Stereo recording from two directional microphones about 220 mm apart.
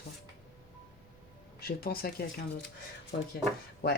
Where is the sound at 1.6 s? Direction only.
45° left (ahead or behind).